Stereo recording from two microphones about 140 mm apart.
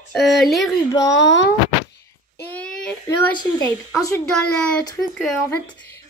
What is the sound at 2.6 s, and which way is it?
Child singing, 5° left (ahead or behind).